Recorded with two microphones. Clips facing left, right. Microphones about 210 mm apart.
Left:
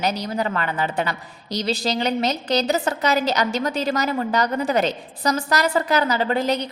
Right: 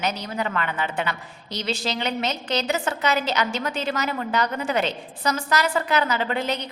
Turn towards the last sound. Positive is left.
turn(degrees=35)  # may be behind; listen again after turning